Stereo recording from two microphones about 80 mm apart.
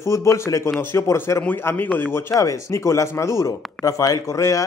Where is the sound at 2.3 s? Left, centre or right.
Left.